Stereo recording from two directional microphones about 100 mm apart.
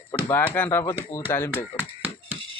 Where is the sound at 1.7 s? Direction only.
60° left (ahead or behind).